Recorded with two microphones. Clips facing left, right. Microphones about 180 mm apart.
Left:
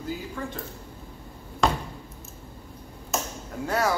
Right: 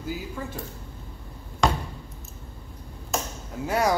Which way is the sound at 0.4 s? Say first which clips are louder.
Left 1 dB; 10° right (ahead or behind).